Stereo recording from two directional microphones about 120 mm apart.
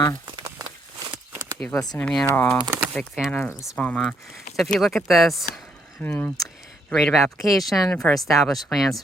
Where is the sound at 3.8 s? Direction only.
10° left (ahead or behind).